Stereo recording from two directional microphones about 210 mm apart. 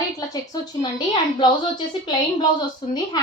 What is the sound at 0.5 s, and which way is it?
Speech, 20° left (ahead or behind).